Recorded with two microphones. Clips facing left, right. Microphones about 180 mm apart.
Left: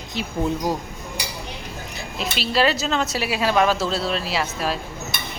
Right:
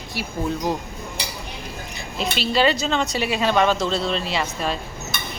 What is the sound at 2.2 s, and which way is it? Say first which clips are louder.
A woman's voice: right 1 dB; centre (ahead or behind).